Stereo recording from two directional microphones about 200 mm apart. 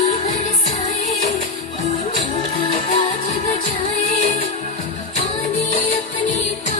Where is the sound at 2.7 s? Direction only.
30° left (ahead or behind).